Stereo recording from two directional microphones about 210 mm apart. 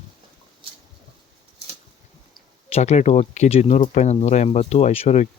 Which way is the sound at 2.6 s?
30° left (ahead or behind).